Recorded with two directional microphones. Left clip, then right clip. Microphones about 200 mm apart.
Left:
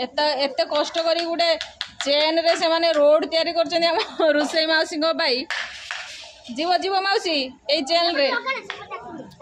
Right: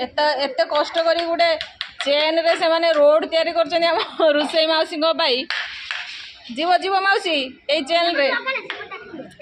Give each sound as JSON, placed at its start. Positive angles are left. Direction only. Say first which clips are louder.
{"t": 0.0, "sound": "a woman's voice", "louder": "right 2 dB", "side_deg": 5}
{"t": 1.5, "sound": "a sound", "louder": "right 2 dB", "side_deg": -45}
{"t": 2.0, "sound": "a woman's voice", "louder": "right 1 dB", "side_deg": 5}
{"t": 6.6, "sound": "a woman's voice", "louder": "right 3 dB", "side_deg": 5}